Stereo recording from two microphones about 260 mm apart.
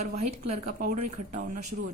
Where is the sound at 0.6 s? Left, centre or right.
Right.